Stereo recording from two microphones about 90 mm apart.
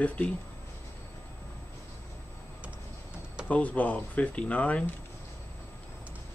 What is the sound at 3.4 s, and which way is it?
Speech, 15° left (ahead or behind).